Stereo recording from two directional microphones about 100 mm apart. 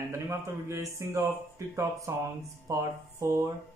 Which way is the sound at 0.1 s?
25° right (ahead or behind).